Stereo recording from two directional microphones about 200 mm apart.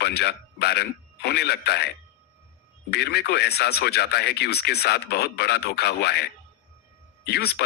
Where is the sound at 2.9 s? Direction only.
55° left (ahead or behind).